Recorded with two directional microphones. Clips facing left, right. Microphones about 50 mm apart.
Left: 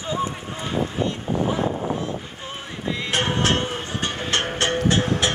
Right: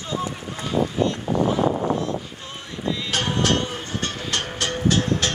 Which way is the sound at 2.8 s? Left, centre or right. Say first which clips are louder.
Left 1 dB; left.